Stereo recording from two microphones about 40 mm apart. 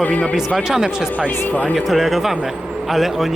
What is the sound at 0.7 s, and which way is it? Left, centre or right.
Speech, centre.